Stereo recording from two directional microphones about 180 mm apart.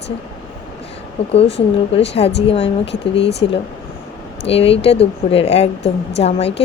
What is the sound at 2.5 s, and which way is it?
Speech, 30° left (ahead or behind).